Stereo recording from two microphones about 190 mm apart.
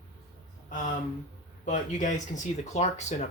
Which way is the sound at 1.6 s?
40° left (ahead or behind).